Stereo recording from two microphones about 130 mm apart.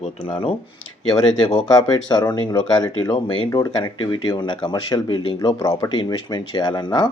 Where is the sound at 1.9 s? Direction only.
30° left (ahead or behind).